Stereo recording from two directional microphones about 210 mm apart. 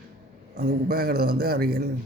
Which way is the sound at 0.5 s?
45° right (ahead or behind).